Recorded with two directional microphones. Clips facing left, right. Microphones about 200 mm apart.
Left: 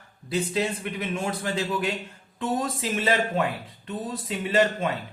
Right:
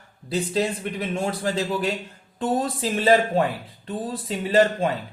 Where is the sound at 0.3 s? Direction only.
35° right (ahead or behind).